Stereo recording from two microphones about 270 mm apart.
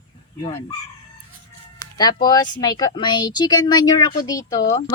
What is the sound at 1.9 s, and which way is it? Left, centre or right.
Speech, centre.